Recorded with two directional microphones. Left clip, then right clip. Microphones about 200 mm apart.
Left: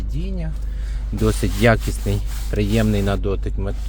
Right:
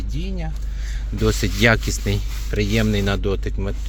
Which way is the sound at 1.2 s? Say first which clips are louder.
Even; 15° left (ahead or behind).